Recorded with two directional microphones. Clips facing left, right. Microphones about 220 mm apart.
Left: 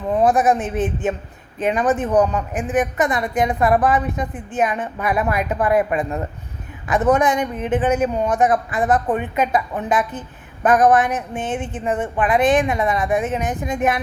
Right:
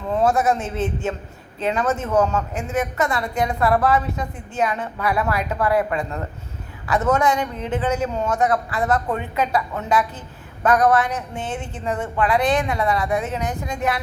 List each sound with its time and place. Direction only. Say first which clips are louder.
0.1 s a man's voice: left 3 dB; 15° left (ahead or behind)